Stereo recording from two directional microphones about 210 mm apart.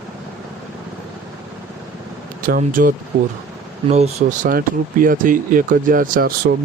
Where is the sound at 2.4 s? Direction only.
40° right (ahead or behind).